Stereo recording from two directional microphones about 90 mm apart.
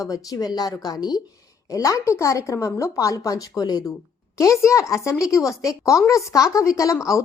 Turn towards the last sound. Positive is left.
turn(degrees=35)  # may be behind; listen again after turning